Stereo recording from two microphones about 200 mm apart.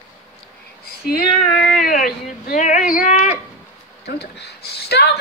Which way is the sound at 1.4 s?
5° left (ahead or behind).